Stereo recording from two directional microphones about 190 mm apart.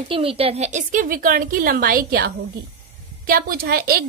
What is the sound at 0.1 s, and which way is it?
A woman's voice, 30° right (ahead or behind).